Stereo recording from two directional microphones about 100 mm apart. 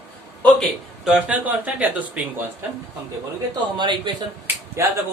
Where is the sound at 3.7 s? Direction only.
50° right (ahead or behind).